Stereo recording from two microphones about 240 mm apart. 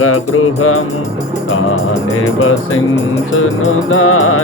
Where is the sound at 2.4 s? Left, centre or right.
Left.